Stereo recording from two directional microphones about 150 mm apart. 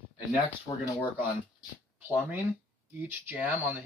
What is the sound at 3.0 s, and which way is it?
Speech, 10° right (ahead or behind).